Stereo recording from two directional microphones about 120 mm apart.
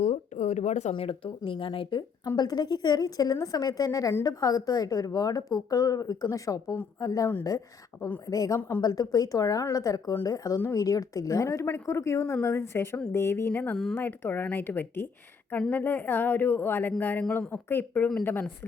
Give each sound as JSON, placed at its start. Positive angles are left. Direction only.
{"t": 0.0, "sound": "a woman's voice", "side_deg": 70}
{"t": 8.3, "sound": "a woman's voice", "side_deg": 30}